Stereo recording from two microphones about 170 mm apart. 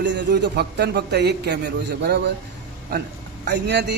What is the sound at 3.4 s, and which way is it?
Speech, 85° right.